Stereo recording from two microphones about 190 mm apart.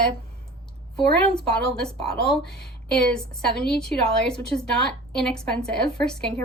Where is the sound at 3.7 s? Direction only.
5° left (ahead or behind).